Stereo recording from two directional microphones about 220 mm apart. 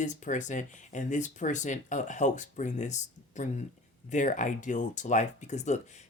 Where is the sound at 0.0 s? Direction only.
35° left (ahead or behind).